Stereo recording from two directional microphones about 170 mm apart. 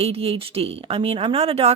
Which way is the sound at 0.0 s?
35° right (ahead or behind).